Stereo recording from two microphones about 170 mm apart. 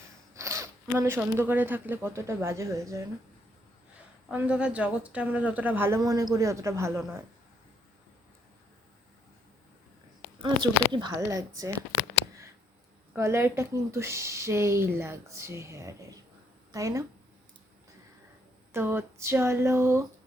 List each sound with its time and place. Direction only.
0.3 s speech: 15° right (ahead or behind)
4.3 s speech: 5° right (ahead or behind)
10.4 s speech: 25° right (ahead or behind)
13.1 s speech: 15° right (ahead or behind)
18.7 s speech: 15° right (ahead or behind)